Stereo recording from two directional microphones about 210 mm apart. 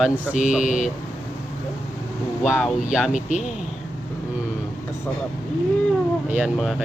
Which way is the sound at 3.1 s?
35° left (ahead or behind).